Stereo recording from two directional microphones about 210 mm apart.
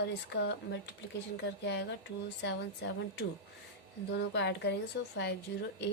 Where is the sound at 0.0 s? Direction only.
55° left (ahead or behind).